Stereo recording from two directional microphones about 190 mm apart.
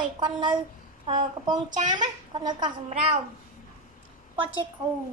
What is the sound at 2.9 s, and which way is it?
Speech, 35° right (ahead or behind).